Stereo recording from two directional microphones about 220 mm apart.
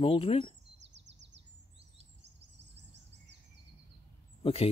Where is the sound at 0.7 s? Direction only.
55° right (ahead or behind).